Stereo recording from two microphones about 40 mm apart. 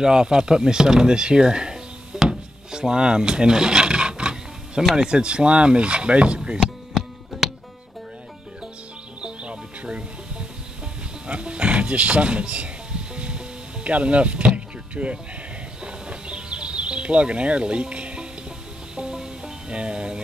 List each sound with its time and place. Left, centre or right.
0.0 s speech: centre
2.1 s wood: centre
2.8 s a sound: centre
4.9 s speech: right
6.9 s music: centre
9.2 s music: right
11.2 s a sound: right
13.8 s speech: right
15.8 s music: right